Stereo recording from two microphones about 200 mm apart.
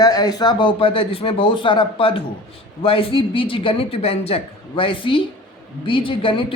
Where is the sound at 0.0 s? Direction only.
20° left (ahead or behind).